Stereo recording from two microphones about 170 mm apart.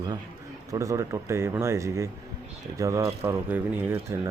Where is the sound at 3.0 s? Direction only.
35° right (ahead or behind).